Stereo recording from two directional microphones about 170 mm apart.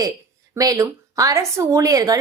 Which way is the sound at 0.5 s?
20° right (ahead or behind).